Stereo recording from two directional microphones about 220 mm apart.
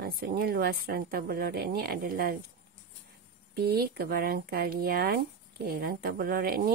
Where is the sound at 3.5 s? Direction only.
45° right (ahead or behind).